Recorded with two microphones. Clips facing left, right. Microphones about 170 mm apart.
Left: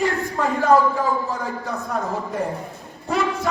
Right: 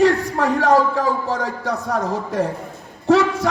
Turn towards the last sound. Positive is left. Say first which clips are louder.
# right 7 dB
turn(degrees=-75)  # may be behind; listen again after turning